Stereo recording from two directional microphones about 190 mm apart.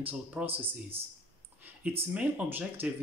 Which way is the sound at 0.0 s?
10° right (ahead or behind).